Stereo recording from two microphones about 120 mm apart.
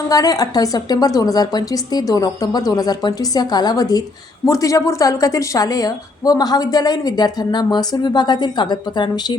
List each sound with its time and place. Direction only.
0.1 s a woman's voice: 30° left (ahead or behind)